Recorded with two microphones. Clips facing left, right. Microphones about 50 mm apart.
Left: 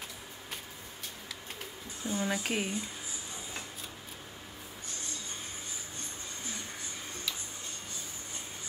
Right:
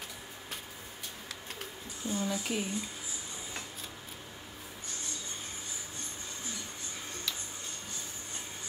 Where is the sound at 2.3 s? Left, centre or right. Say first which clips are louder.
Left 2 dB; left.